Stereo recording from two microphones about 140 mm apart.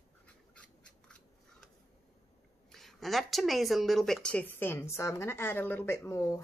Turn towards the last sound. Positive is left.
turn(degrees=20)  # may be behind; listen again after turning